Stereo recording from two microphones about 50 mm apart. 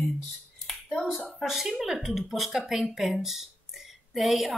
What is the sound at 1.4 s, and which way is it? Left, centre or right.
Speech, centre.